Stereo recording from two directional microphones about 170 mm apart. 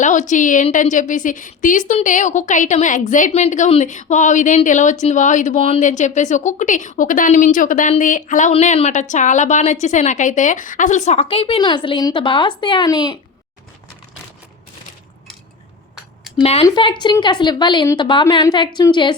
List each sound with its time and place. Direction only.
0.0 s a woman's voice: 45° left (ahead or behind); by 13.1 s 20° left (ahead or behind)
16.4 s a woman's voice: 35° left (ahead or behind)